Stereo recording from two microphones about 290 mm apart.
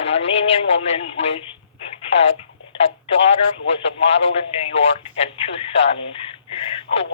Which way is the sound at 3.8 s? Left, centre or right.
Left.